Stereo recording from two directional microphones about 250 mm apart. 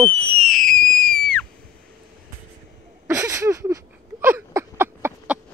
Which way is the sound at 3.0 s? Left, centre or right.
Centre.